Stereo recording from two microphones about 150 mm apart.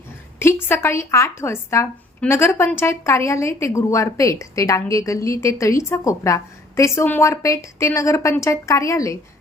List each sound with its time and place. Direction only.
0.3 s a woman's voice: 15° left (ahead or behind)